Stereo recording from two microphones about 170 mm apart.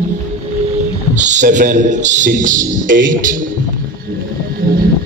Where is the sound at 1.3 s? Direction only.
50° right (ahead or behind).